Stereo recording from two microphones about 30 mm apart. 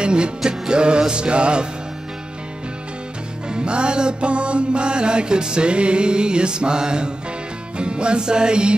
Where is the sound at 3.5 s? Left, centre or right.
Right.